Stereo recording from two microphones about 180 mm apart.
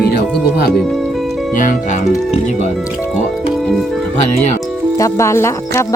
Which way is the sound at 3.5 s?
Centre (ahead or behind).